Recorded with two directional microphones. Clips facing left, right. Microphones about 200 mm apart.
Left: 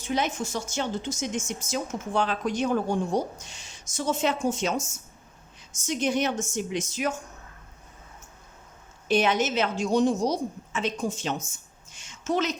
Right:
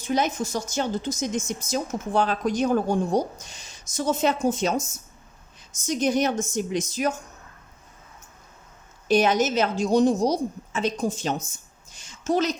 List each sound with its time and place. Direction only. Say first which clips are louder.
0.0 s speech: right 3 dB; 40° right (ahead or behind)
5.8 s speech: right 3 dB; 40° right (ahead or behind)
9.0 s speech: right 3 dB; 40° right (ahead or behind)
11.9 s a sound: right 3 dB; 35° right (ahead or behind)